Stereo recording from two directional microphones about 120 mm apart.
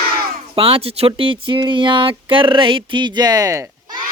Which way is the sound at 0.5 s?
50° right (ahead or behind).